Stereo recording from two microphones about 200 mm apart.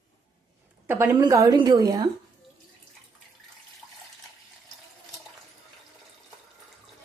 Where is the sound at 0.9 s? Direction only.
15° right (ahead or behind).